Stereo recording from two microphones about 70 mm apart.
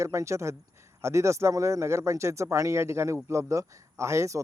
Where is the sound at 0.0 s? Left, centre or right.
Right.